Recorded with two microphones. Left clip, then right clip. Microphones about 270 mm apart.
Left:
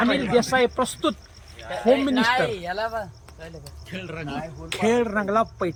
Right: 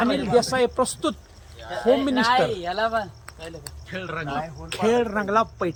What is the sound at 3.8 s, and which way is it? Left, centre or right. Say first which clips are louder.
A man's voice: right 4 dB; centre.